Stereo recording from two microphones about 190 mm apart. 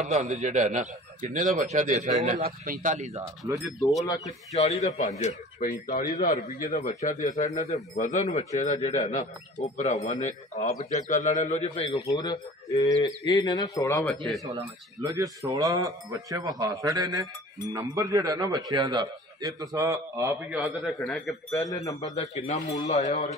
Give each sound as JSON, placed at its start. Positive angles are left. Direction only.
{"t": 0.0, "sound": "a man's voice", "side_deg": -40}
{"t": 4.2, "sound": "speech", "side_deg": 35}
{"t": 5.6, "sound": "a man's voice", "side_deg": 50}
{"t": 12.1, "sound": "speech", "side_deg": 20}
{"t": 15.0, "sound": "a man's voice", "side_deg": -15}
{"t": 20.5, "sound": "speech", "side_deg": -5}
{"t": 21.5, "sound": "speech", "side_deg": 15}
{"t": 22.1, "sound": "speech", "side_deg": 35}